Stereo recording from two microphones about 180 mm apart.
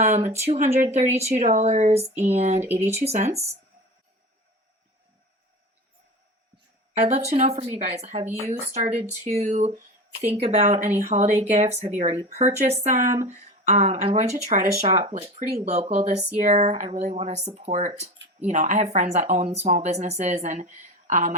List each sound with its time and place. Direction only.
0.0 s speech: 40° right (ahead or behind)
6.9 s speech: 40° right (ahead or behind)